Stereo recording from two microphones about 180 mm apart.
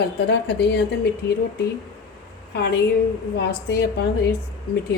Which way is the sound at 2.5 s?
70° left (ahead or behind).